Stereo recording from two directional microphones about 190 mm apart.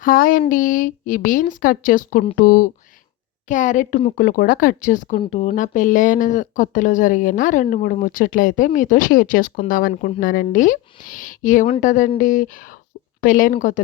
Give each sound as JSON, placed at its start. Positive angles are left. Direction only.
{"t": 0.0, "sound": "speech", "side_deg": 45}